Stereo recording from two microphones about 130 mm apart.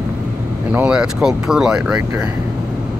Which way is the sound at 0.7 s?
10° right (ahead or behind).